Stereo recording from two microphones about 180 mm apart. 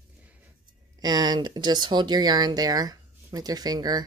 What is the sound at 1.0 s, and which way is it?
Speech, 20° right (ahead or behind).